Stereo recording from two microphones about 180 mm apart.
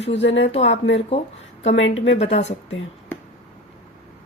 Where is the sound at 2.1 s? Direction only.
35° left (ahead or behind).